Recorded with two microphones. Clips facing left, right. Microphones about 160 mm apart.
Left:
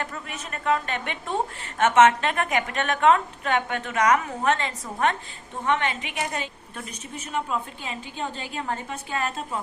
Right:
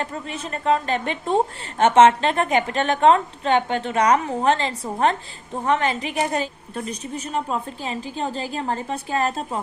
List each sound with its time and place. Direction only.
0.0 s a woman's voice: 30° right (ahead or behind)